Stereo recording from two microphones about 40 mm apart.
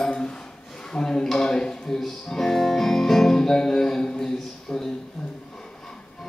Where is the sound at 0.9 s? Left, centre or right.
Centre.